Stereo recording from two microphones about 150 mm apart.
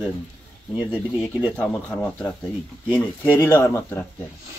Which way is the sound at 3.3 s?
15° left (ahead or behind).